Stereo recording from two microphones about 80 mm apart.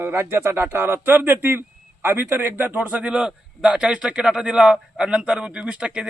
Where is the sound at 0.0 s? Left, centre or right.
Right.